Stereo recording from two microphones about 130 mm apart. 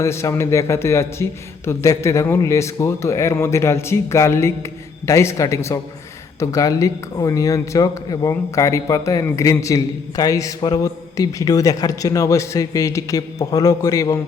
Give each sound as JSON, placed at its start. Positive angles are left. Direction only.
{"t": 0.0, "sound": "a man's voice", "side_deg": 20}